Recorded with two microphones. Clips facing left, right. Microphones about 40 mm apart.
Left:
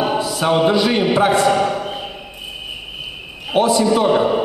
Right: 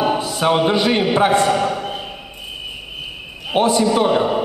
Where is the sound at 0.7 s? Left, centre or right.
Right.